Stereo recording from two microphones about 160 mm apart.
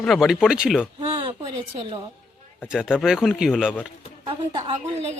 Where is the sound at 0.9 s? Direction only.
35° right (ahead or behind).